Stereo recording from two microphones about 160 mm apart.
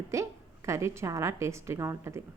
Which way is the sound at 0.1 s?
20° right (ahead or behind).